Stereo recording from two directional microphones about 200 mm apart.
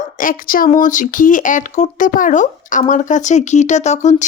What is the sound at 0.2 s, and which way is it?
Speech, 45° left (ahead or behind).